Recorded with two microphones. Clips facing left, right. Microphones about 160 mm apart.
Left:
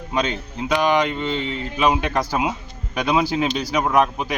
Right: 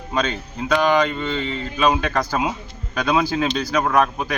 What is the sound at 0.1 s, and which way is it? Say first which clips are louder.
Speech: even; 15° left (ahead or behind).